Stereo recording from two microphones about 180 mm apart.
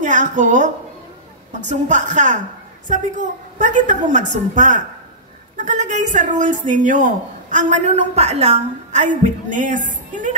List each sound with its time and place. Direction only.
0.0 s a woman's voice: 45° right (ahead or behind)